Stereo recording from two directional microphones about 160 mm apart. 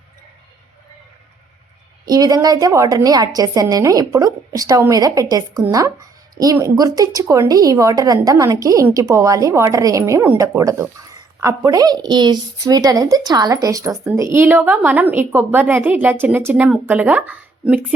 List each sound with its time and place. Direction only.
2.0 s a woman's voice: 25° right (ahead or behind)